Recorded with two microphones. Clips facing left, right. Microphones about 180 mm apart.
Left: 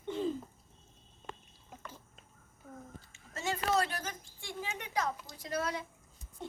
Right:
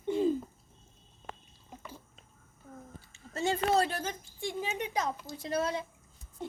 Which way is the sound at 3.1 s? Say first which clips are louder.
Right 6 dB; 30° right (ahead or behind).